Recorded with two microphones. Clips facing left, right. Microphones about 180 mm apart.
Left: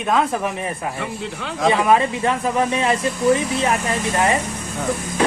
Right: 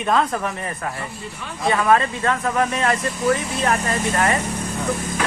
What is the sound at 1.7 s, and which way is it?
Speech, 20° left (ahead or behind).